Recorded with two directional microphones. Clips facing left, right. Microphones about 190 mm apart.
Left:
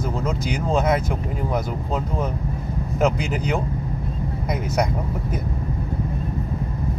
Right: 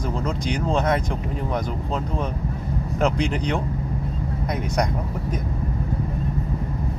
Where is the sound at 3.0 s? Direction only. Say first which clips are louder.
Left 1 dB; 5° left (ahead or behind).